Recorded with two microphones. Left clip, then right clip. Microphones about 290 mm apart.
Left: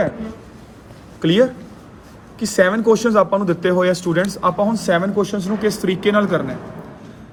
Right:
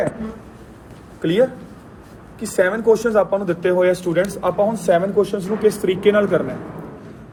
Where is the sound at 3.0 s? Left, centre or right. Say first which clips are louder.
Left 2 dB; left.